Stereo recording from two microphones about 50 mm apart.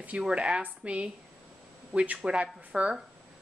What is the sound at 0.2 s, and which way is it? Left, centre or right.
A woman's voice, right.